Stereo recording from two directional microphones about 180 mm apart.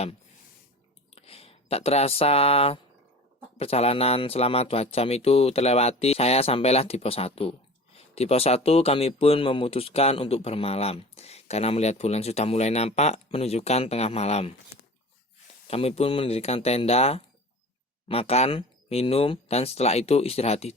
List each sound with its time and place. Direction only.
1.1 s speech: 35° left (ahead or behind)
15.6 s speech: 35° left (ahead or behind)